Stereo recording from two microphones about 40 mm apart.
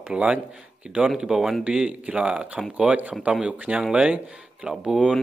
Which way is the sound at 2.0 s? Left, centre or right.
Right.